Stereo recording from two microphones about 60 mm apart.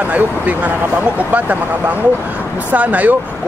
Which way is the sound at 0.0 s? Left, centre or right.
Right.